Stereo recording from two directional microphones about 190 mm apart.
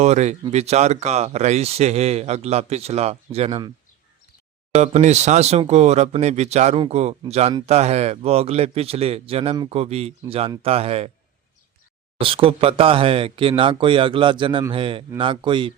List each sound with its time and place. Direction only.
0.0 s speech: 35° right (ahead or behind)
4.7 s speech: 35° right (ahead or behind)
12.2 s speech: 30° right (ahead or behind)